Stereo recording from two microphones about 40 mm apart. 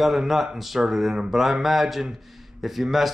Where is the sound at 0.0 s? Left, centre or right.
Centre.